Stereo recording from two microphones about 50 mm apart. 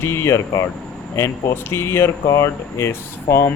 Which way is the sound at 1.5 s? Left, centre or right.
Left.